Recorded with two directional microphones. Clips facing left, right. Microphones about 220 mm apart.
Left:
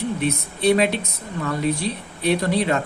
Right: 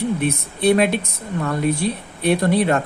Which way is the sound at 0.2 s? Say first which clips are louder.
Right 2 dB; 55° right (ahead or behind).